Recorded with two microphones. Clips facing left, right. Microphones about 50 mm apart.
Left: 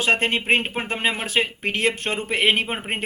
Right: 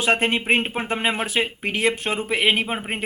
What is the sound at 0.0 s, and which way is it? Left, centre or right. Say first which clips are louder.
Speech: even; right.